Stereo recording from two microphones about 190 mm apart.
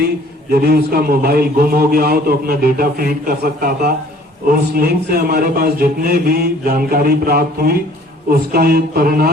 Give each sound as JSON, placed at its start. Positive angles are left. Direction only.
{"t": 0.5, "sound": "a man's voice", "side_deg": -55}